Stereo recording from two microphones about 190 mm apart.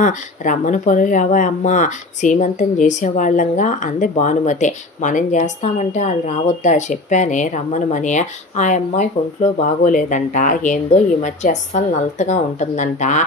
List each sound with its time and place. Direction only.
0.0 s speech: 40° left (ahead or behind)